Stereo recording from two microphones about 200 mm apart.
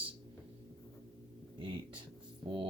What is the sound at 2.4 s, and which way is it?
Music, 20° right (ahead or behind).